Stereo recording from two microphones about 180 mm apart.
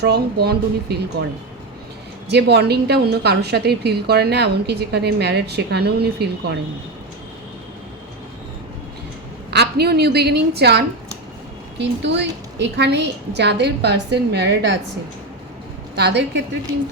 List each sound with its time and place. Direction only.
0.0 s a woman's voice: 65° right (ahead or behind)
2.3 s a woman's voice: 65° right (ahead or behind)
9.5 s a woman's voice: 65° right (ahead or behind)
11.8 s a woman's voice: 75° right (ahead or behind)
16.0 s a woman's voice: 70° right (ahead or behind)